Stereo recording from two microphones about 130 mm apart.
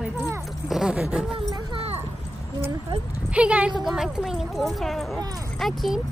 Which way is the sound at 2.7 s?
45° right (ahead or behind).